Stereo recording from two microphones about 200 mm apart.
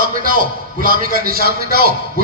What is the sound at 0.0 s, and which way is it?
A man's voice, 45° right (ahead or behind).